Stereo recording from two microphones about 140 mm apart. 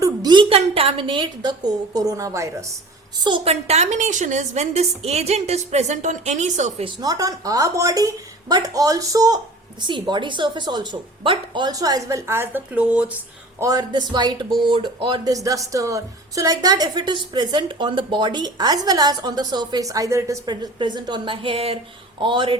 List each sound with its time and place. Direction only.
0.0 s a sound: 30° right (ahead or behind)
0.4 s a woman's voice: 45° right (ahead or behind); by 2.7 s 20° right (ahead or behind)
3.2 s a woman's voice: 40° right (ahead or behind)
7.0 s a woman's voice: 25° right (ahead or behind); by 13.1 s 10° right (ahead or behind)
13.6 s a woman's voice: 25° right (ahead or behind)